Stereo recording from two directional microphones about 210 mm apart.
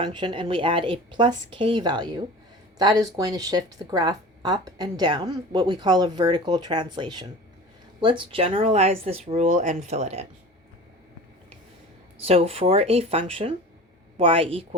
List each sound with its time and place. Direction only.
0.0 s a woman's voice: 20° right (ahead or behind)
12.2 s a woman's voice: 30° right (ahead or behind)